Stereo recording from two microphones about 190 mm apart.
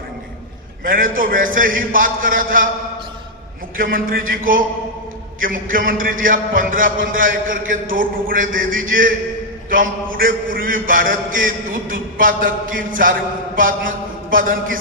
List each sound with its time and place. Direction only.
0.9 s a man's voice: 45° right (ahead or behind)
3.8 s a man's voice: 50° right (ahead or behind)